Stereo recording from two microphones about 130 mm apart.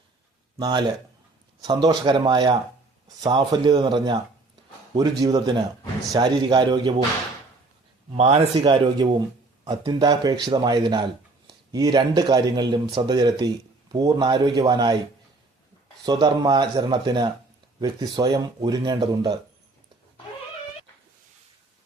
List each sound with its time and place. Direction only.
0.6 s speech: 35° right (ahead or behind)
8.1 s a man's voice: 55° right (ahead or behind)
8.6 s speech: 35° right (ahead or behind)
16.0 s speech: 35° right (ahead or behind)